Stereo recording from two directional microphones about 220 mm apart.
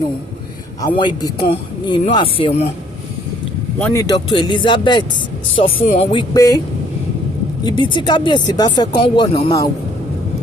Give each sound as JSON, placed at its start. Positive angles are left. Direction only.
{"t": 0.8, "sound": "speech", "side_deg": 20}
{"t": 3.8, "sound": "speech", "side_deg": 5}
{"t": 4.0, "sound": "speech", "side_deg": 20}
{"t": 7.6, "sound": "speech", "side_deg": 20}